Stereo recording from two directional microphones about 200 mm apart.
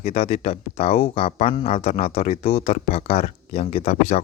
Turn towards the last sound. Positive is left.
turn(degrees=30)  # may be behind; listen again after turning